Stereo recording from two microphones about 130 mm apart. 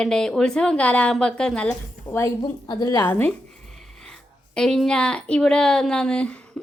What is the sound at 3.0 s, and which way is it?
Speech, 15° left (ahead or behind).